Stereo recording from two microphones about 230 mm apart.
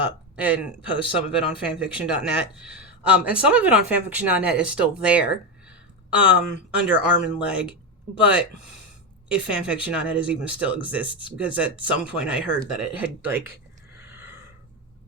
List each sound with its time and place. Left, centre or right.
0.3 s speech: centre
9.6 s speech: centre